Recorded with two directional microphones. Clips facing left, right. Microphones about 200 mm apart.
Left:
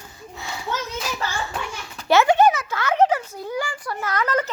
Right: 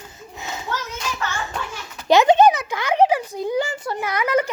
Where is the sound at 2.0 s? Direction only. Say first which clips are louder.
Right 2 dB; 20° right (ahead or behind).